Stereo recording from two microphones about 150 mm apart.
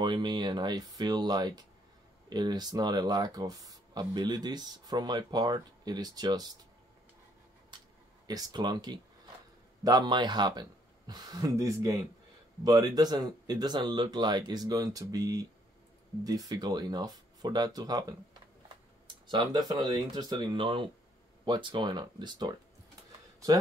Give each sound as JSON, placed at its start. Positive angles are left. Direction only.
{"t": 0.0, "sound": "speech", "side_deg": -30}
{"t": 7.7, "sound": "a sound", "side_deg": -30}
{"t": 8.3, "sound": "speech", "side_deg": -25}
{"t": 19.2, "sound": "speech", "side_deg": -30}